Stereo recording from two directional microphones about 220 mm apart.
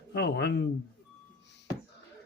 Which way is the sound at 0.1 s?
50° left (ahead or behind).